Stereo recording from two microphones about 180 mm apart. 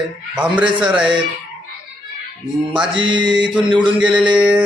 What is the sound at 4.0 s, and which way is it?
Speech, 5° right (ahead or behind).